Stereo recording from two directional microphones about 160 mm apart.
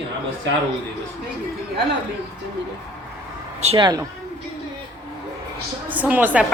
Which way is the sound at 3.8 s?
25° right (ahead or behind).